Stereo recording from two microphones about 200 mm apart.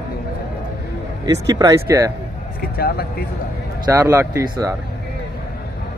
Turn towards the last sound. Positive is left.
turn(degrees=-15)  # may be behind; listen again after turning